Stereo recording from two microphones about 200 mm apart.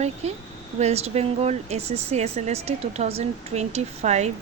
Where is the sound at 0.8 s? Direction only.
35° right (ahead or behind).